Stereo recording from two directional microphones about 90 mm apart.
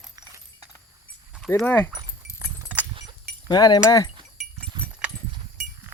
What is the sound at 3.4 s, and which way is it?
Speech, 50° left (ahead or behind).